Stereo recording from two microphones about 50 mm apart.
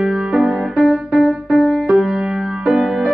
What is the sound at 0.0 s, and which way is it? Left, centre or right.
Music, centre.